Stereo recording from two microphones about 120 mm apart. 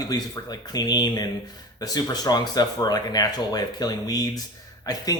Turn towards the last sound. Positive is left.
turn(degrees=30)  # may be behind; listen again after turning